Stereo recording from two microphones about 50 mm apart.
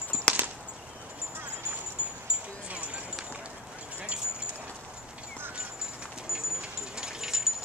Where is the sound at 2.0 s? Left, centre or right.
Right.